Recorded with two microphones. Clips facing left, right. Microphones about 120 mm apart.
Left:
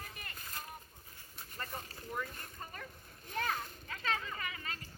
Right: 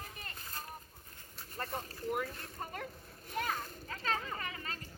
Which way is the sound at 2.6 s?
70° right (ahead or behind).